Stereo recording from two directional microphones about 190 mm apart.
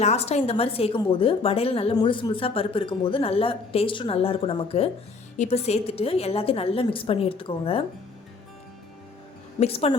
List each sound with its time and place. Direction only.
0.0 s a woman's voice: 35° left (ahead or behind)
9.6 s a woman's voice: 30° left (ahead or behind)